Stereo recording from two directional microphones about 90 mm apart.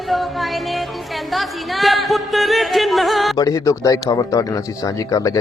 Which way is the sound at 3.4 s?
40° left (ahead or behind).